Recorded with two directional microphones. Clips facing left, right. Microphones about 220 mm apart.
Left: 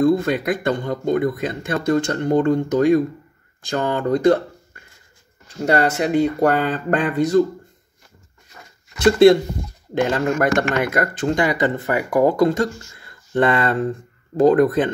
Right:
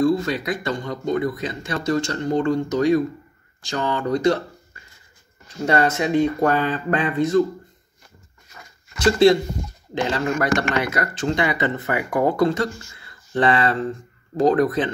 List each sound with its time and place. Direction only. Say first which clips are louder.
0.0 s speech: left 3 dB; 55° left (ahead or behind)
6.0 s speech: left 2 dB; 40° left (ahead or behind)
9.0 s speech: left 3 dB; 55° left (ahead or behind)